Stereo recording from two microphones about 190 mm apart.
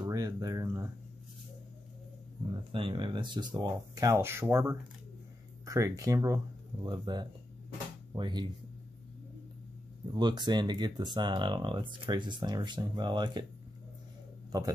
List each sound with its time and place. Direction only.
0.0 s a sound: 20° right (ahead or behind)
2.7 s speech: 25° right (ahead or behind)
10.1 s speech: 25° right (ahead or behind)